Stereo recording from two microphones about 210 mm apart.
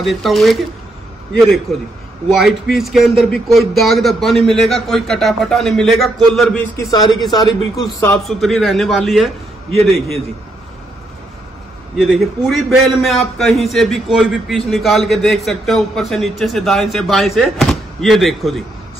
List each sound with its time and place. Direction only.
0.0 s a man's voice: centre (ahead or behind)
1.7 s a man's voice: centre (ahead or behind)
6.8 s a man's voice: 20° left (ahead or behind); by 10.1 s centre (ahead or behind)
12.0 s a man's voice: centre (ahead or behind)